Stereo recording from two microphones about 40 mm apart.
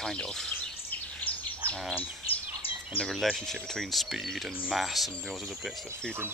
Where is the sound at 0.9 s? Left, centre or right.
Left.